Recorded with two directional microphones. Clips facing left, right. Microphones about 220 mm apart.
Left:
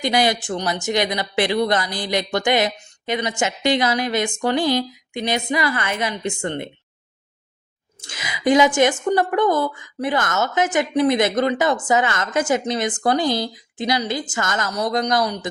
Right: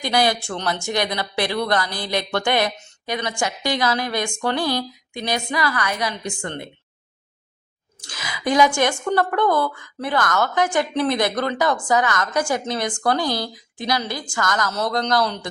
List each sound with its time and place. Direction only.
0.0 s a woman's voice: 20° left (ahead or behind)
8.0 s a woman's voice: 20° left (ahead or behind)